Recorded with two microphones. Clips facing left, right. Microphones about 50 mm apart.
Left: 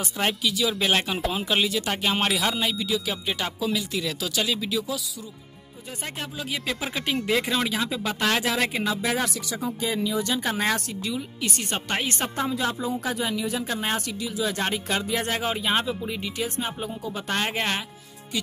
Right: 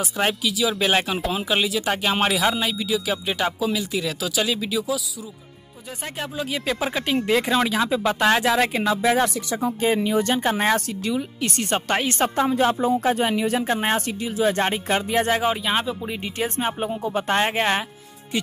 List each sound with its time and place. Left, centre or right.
0.0 s speech: centre
6.3 s speech: centre
9.1 s speech: right
10.4 s speech: right
11.4 s speech: centre
12.4 s speech: right
13.7 s speech: right
15.3 s speech: centre
16.2 s speech: right